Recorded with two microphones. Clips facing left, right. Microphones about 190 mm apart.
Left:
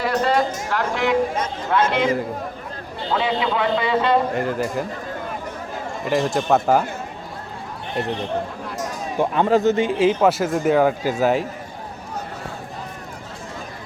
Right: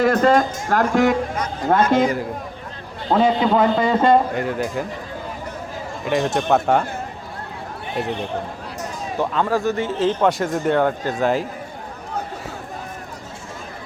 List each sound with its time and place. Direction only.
0.0 s speech: 50° right (ahead or behind)
3.1 s speech: 45° right (ahead or behind)
4.4 s speech: centre (ahead or behind)
6.1 s speech: centre (ahead or behind)
7.9 s speech: centre (ahead or behind)
9.1 s speech: 20° left (ahead or behind); by 11.4 s 5° left (ahead or behind)